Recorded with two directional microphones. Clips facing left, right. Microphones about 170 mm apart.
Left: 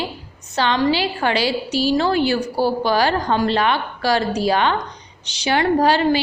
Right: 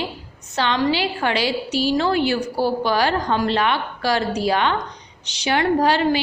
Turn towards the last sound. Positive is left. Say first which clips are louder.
# left 2 dB
turn(degrees=35)  # may be behind; listen again after turning